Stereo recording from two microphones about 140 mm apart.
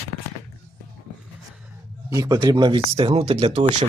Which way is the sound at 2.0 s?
25° right (ahead or behind).